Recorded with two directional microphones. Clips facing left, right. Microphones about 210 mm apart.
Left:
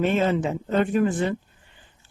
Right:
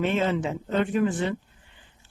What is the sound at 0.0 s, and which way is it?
Speech, 45° left (ahead or behind).